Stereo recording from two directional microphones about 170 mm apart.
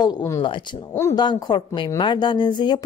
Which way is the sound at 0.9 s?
15° left (ahead or behind).